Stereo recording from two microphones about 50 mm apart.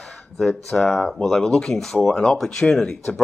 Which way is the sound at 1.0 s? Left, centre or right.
Centre.